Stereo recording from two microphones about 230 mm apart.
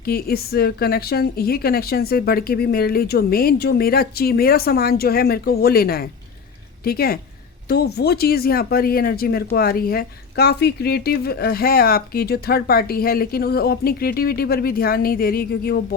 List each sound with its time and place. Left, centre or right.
0.0 s speech: left